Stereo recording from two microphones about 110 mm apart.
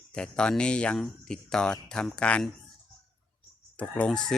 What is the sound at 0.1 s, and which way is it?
Speech, 5° left (ahead or behind).